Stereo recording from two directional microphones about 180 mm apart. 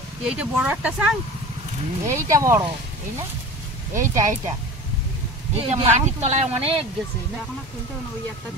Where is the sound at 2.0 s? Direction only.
15° right (ahead or behind).